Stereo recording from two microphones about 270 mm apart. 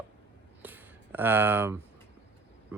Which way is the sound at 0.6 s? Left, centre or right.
Centre.